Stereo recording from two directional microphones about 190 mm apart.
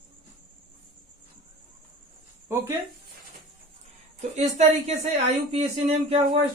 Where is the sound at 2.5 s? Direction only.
15° right (ahead or behind).